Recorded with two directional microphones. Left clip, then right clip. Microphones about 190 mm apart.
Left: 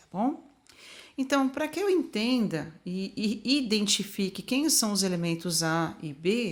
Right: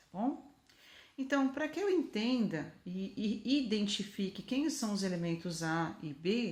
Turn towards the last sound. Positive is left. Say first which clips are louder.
# left 7 dB
turn(degrees=30)  # may be behind; listen again after turning